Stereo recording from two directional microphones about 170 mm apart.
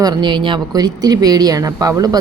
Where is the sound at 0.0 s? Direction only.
25° right (ahead or behind).